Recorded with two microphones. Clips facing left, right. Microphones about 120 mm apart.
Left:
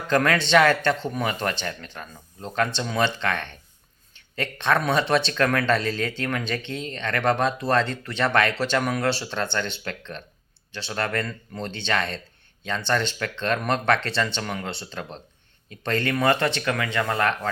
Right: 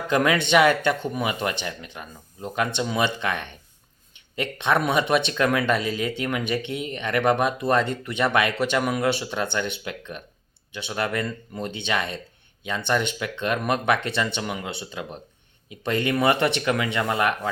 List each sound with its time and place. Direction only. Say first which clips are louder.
0.1 s speech: even; 15° right (ahead or behind)